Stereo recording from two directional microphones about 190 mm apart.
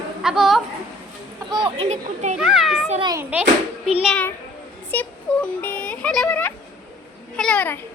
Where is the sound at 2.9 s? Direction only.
25° right (ahead or behind).